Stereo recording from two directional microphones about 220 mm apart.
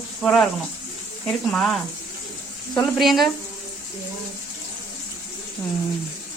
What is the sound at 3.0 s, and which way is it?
Speech, centre (ahead or behind).